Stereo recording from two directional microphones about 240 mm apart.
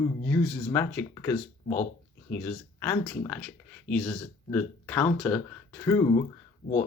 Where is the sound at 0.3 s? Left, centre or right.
Centre.